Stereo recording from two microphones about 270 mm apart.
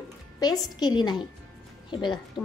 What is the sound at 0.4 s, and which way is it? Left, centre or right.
A woman's voice, centre.